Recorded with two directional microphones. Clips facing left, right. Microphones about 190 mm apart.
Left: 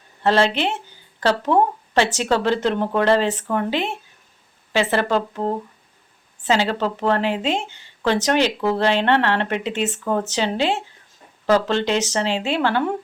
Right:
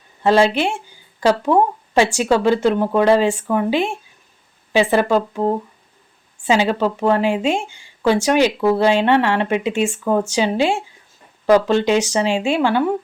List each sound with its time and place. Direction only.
0.2 s speech: 15° right (ahead or behind)